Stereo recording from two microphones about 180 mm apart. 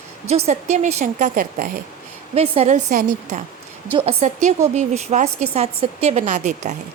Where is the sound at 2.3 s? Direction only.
35° right (ahead or behind).